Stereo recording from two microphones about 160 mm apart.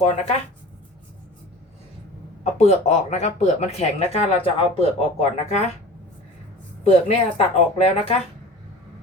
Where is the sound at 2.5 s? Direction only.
45° left (ahead or behind).